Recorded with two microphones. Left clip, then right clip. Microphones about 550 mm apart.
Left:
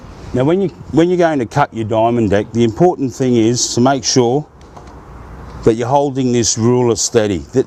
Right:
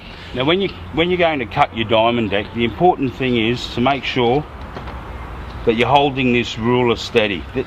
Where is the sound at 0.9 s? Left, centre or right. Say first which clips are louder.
Left 4 dB; left.